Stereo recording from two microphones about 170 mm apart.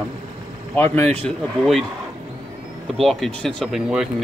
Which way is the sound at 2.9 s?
Centre (ahead or behind).